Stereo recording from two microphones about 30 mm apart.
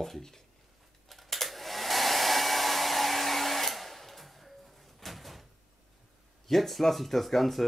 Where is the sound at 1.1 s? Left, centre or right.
Centre.